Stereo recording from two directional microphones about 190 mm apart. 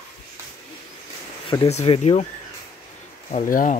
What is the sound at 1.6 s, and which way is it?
Speech, 30° left (ahead or behind).